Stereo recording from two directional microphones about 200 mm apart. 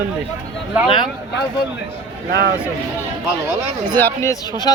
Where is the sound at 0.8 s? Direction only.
25° left (ahead or behind).